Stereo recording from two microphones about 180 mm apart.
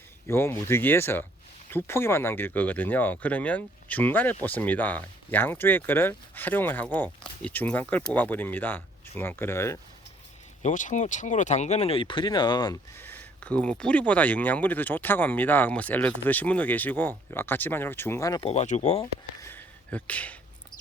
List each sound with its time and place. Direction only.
0.3 s speech: 15° left (ahead or behind)
10.6 s speech: 40° left (ahead or behind); by 12.8 s 25° left (ahead or behind)
13.0 s speech: 10° left (ahead or behind)
18.3 s speech: 35° left (ahead or behind)
19.4 s a sound: 10° left (ahead or behind)